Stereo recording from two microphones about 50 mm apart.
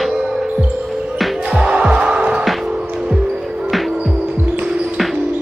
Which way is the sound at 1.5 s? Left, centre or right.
Centre.